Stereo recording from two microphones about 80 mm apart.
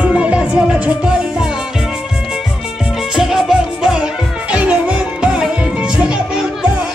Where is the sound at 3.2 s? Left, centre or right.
Centre.